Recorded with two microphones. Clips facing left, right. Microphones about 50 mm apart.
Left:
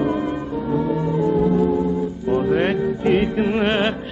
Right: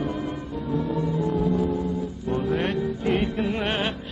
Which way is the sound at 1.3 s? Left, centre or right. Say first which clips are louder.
Left 7 dB; left.